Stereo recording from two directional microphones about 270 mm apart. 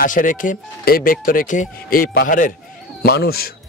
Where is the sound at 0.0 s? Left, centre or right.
Left.